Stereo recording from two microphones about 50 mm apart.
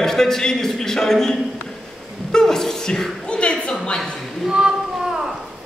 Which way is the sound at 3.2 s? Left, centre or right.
Centre.